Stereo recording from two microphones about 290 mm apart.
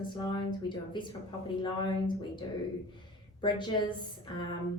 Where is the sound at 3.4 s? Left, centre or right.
Centre.